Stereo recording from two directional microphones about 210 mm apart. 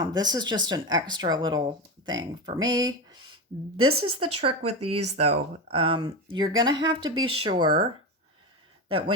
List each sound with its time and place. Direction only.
0.1 s speech: 20° right (ahead or behind)
3.8 s speech: 90° right
4.4 s speech: 30° right (ahead or behind)
4.7 s speech: 90° right
5.1 s speech: 30° right (ahead or behind)
8.9 s speech: 25° right (ahead or behind)